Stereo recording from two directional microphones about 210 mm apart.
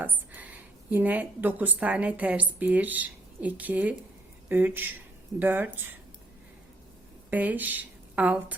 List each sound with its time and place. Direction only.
0.0 s a woman's voice: 10° right (ahead or behind)
7.3 s a woman's voice: 10° right (ahead or behind)